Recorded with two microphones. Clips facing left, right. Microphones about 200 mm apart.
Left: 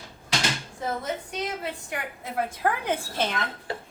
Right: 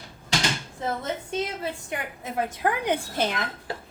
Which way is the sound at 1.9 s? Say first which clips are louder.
Right 1 dB; 20° right (ahead or behind).